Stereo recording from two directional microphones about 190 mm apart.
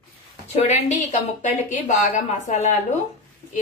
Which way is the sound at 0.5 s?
35° left (ahead or behind).